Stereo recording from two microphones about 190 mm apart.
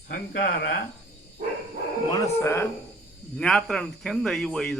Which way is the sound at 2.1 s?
15° left (ahead or behind).